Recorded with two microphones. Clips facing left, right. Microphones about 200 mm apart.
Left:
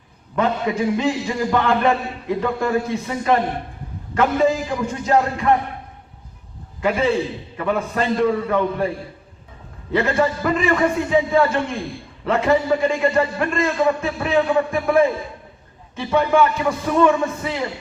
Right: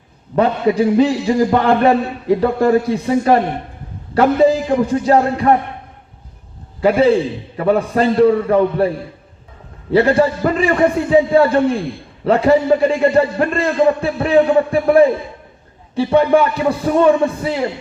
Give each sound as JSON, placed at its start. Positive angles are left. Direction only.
{"t": 0.3, "sound": "a man's voice", "side_deg": -35}
{"t": 6.8, "sound": "a man's voice", "side_deg": -35}
{"t": 9.9, "sound": "a man's voice", "side_deg": -35}